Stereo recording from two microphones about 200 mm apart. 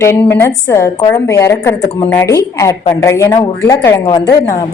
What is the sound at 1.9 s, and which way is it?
Speech, 30° left (ahead or behind).